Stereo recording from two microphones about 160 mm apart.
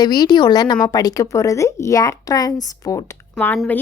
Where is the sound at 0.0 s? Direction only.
25° left (ahead or behind).